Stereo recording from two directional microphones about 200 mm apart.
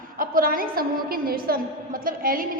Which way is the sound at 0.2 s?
45° right (ahead or behind).